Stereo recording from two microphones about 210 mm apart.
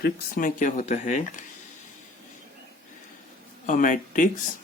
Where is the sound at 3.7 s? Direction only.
40° left (ahead or behind).